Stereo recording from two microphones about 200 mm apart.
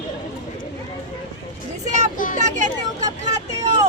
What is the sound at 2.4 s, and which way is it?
Speech, 35° right (ahead or behind).